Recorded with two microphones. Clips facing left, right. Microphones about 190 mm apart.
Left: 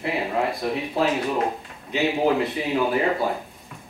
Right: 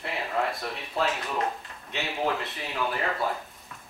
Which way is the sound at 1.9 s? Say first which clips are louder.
Left 8 dB; 5° left (ahead or behind).